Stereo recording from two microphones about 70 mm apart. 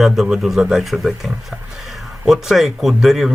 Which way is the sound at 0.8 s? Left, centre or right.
Centre.